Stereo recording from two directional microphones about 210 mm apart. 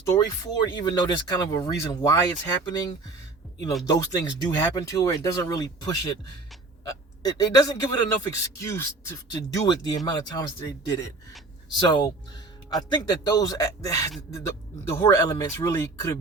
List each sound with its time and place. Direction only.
0.0 s speech: 20° left (ahead or behind)